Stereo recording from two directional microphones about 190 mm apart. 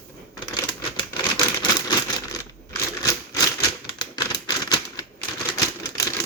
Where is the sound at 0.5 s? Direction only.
20° left (ahead or behind).